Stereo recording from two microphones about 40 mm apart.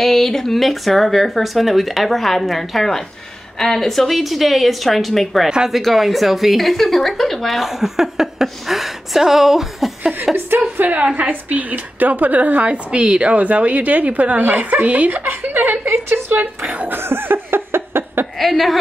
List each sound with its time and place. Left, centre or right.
0.0 s a woman's voice: centre
10.8 s a woman's voice: right
12.7 s a woman's voice: right
15.9 s a woman's voice: right
16.3 s a woman's voice: right
16.9 s laughter: right
18.4 s a woman's voice: centre